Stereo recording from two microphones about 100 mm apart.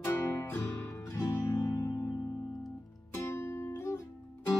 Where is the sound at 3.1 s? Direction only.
25° left (ahead or behind).